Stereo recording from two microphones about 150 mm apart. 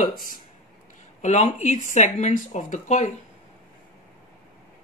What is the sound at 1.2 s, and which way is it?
Speech, 50° left (ahead or behind).